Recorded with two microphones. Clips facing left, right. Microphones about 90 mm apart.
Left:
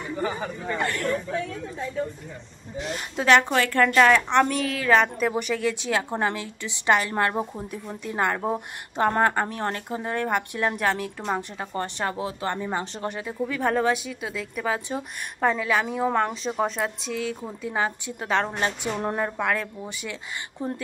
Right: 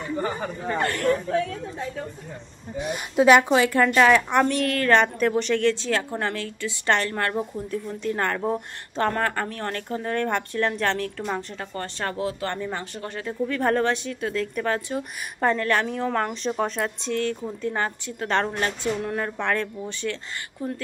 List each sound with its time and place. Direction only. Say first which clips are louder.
0.2 s speech: right 1 dB; 45° right (ahead or behind)
2.8 s a woman's voice: right 8 dB; 15° right (ahead or behind); by 18.3 s 10° left (ahead or behind)
18.5 s a woman's voice: right 1 dB; 25° left (ahead or behind)
19.1 s speech: even; 10° left (ahead or behind)
20.6 s a woman's voice: even; 25° left (ahead or behind)